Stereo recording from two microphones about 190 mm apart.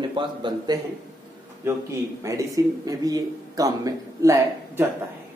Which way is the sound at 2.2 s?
15° right (ahead or behind).